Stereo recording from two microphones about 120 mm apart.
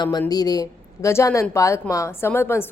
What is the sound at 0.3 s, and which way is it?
A woman's voice, 30° left (ahead or behind).